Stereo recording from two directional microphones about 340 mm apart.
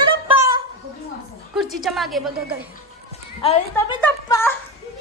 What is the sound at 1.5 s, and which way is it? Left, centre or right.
A woman's voice, centre.